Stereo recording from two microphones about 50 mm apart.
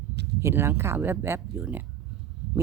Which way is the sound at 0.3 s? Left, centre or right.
Right.